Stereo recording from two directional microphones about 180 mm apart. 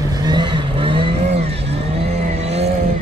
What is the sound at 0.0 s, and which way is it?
Vehicle, 20° right (ahead or behind).